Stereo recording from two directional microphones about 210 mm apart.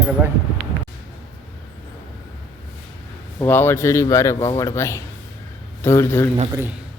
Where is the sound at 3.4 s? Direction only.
10° left (ahead or behind).